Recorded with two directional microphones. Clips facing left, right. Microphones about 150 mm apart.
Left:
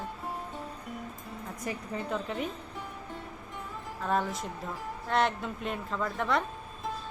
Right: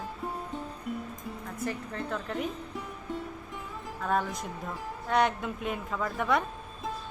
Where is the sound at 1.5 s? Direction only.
15° left (ahead or behind).